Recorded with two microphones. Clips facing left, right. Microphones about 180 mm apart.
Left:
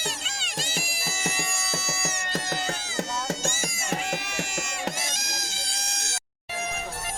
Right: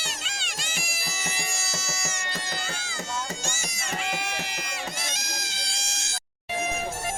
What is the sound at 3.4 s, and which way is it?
Music, 50° left (ahead or behind).